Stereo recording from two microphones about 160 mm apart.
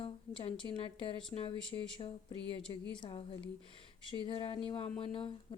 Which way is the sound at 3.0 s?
35° left (ahead or behind).